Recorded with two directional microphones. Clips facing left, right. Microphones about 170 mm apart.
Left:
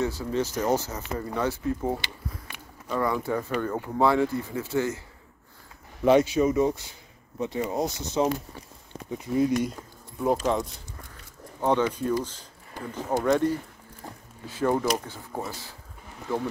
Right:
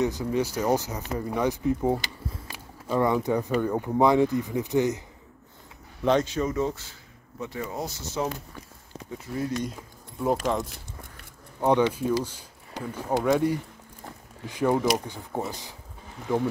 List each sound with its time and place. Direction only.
0.0 s speech: 15° right (ahead or behind)
3.0 s speech: 20° right (ahead or behind)
6.0 s speech: 10° left (ahead or behind)
10.2 s speech: centre (ahead or behind)
11.6 s speech: 10° right (ahead or behind)